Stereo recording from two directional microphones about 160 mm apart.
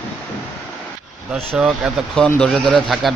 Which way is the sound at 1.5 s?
5° right (ahead or behind).